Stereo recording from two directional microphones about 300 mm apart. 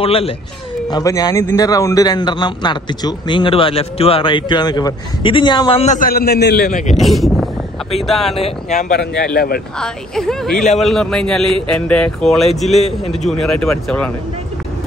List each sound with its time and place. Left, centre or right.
0.0 s a man's voice: centre
7.0 s speech: centre
8.5 s speech: left
9.8 s speech: centre